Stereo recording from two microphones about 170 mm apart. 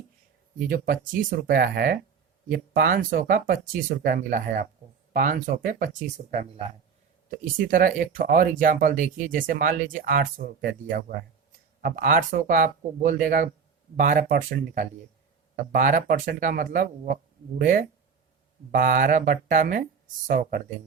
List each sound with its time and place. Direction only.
0.7 s speech: 55° right (ahead or behind)